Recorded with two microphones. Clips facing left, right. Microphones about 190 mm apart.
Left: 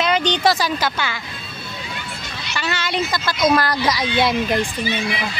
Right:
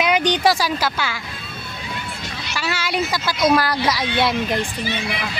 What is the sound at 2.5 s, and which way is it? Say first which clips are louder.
Speech: even; 5° right (ahead or behind).